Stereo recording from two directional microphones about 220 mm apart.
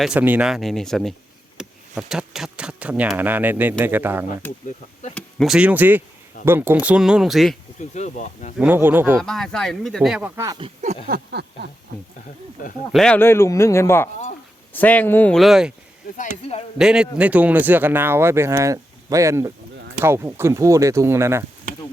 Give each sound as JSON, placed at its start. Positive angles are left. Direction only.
{"t": 0.0, "sound": "speech", "side_deg": -5}
{"t": 7.8, "sound": "speech", "side_deg": 35}
{"t": 8.5, "sound": "speech", "side_deg": -10}
{"t": 9.1, "sound": "speech", "side_deg": 0}
{"t": 11.1, "sound": "a sound", "side_deg": -50}
{"t": 12.9, "sound": "speech", "side_deg": 5}
{"t": 16.7, "sound": "speech", "side_deg": -5}